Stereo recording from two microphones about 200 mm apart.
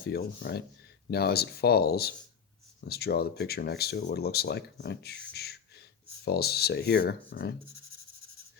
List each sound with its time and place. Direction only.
0.0 s speech: 50° left (ahead or behind)